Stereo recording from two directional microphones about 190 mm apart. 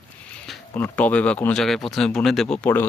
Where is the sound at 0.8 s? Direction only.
10° left (ahead or behind).